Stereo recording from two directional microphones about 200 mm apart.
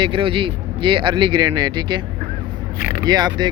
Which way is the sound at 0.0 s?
25° right (ahead or behind).